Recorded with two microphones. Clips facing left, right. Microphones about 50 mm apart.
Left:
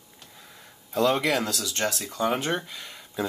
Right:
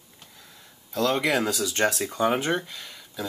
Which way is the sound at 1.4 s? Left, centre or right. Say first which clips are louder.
Right 4 dB; centre.